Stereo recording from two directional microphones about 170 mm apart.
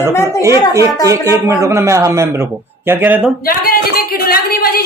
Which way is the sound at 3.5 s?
60° left (ahead or behind).